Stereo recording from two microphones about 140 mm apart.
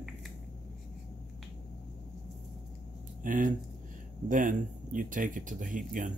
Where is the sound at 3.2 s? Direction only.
70° right (ahead or behind).